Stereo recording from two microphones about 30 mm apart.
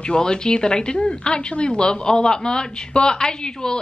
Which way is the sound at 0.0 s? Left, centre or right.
Left.